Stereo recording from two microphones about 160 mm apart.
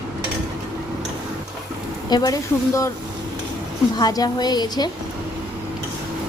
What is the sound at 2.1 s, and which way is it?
Speech, 25° left (ahead or behind).